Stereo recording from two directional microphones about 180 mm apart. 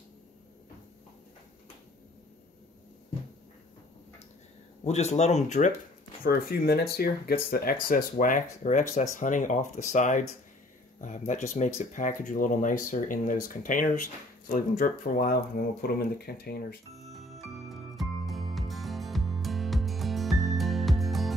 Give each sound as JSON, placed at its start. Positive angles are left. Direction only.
{"t": 4.8, "sound": "speech", "side_deg": 40}
{"t": 6.2, "sound": "speech", "side_deg": 60}
{"t": 16.9, "sound": "music", "side_deg": 0}